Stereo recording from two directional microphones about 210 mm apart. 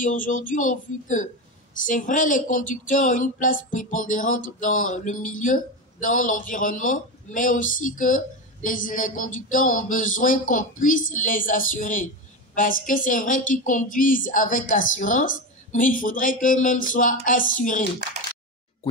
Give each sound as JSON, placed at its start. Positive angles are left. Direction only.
{"t": 0.0, "sound": "a woman's voice", "side_deg": 40}